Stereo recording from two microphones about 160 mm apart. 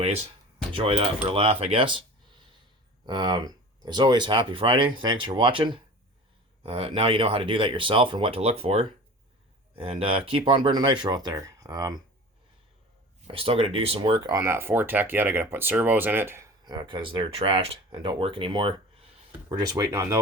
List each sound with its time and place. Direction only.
0.0 s speech: 40° right (ahead or behind)
3.1 s speech: 30° right (ahead or behind)
13.2 s speech: 35° right (ahead or behind); by 16.5 s 15° right (ahead or behind)
16.6 s speech: 30° right (ahead or behind)